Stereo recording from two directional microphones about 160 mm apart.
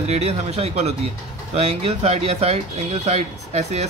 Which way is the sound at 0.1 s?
40° right (ahead or behind).